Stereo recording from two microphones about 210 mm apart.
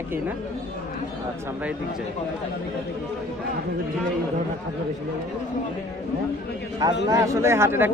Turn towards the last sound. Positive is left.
turn(degrees=-10)  # may be behind; listen again after turning